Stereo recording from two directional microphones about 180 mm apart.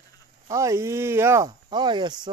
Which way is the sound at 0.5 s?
15° right (ahead or behind).